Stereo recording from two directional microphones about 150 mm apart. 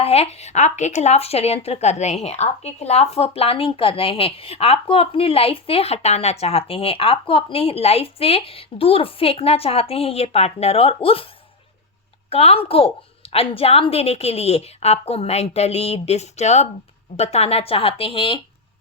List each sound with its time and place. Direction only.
0.0 s a woman's voice: 40° left (ahead or behind)
12.3 s a woman's voice: 45° left (ahead or behind)